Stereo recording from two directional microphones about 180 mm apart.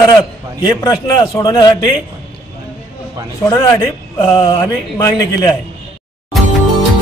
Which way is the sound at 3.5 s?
20° left (ahead or behind).